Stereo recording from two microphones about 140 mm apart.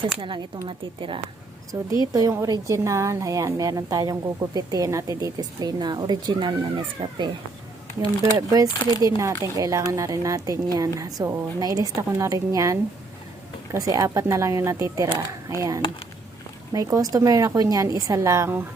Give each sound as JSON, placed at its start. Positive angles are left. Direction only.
{"t": 0.2, "sound": "speech", "side_deg": -30}
{"t": 1.7, "sound": "a woman's voice", "side_deg": -20}
{"t": 7.0, "sound": "speech", "side_deg": -40}
{"t": 8.4, "sound": "a woman's voice", "side_deg": -25}